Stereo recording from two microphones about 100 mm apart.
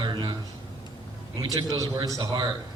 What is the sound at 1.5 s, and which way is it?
Speech, 40° right (ahead or behind).